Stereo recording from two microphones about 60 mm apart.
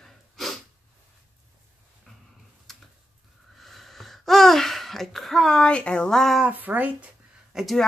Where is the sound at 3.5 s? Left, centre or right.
Centre.